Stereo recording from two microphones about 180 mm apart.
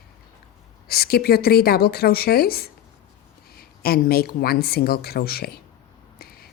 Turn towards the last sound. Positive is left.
turn(degrees=60)  # may be behind; listen again after turning